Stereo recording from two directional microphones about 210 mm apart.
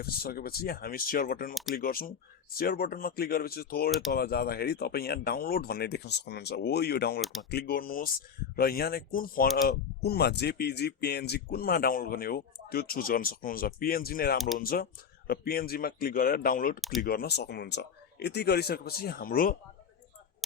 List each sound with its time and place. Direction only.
0.0 s speech: 45° left (ahead or behind)